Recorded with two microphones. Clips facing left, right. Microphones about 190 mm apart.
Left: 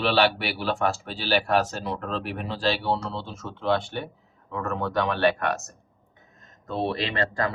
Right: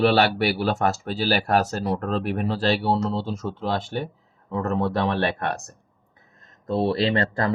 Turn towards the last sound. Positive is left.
turn(degrees=-35)  # may be behind; listen again after turning